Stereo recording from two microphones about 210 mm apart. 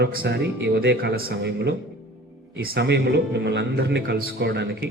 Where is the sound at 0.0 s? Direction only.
50° right (ahead or behind).